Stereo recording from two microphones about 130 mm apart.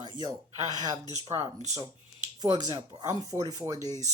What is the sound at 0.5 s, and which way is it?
A woman's voice, 30° right (ahead or behind).